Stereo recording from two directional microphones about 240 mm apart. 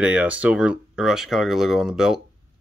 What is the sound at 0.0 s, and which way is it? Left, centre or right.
Speech, centre.